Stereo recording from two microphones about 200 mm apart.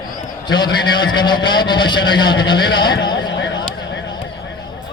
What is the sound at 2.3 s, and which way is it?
Speech, 65° left (ahead or behind).